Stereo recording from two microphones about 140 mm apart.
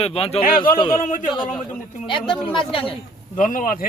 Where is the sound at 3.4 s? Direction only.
80° left.